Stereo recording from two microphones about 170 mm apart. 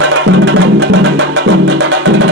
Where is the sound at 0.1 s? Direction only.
90° right.